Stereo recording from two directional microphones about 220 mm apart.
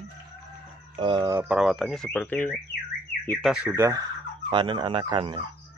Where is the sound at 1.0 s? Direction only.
15° right (ahead or behind).